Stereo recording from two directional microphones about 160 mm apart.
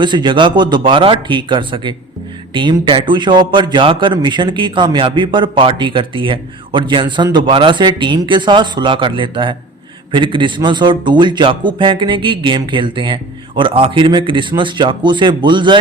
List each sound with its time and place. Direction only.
0.0 s a man's voice: 30° right (ahead or behind)